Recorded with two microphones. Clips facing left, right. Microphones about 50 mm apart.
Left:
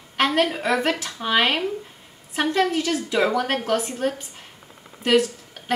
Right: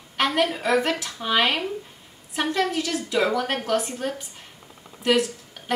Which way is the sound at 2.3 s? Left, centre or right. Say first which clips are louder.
Left 3 dB; left.